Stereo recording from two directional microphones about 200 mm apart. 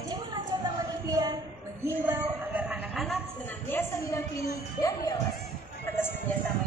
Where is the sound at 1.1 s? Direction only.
20° right (ahead or behind).